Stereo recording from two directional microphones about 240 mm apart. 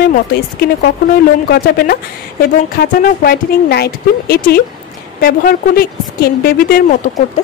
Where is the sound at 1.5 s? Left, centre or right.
Left.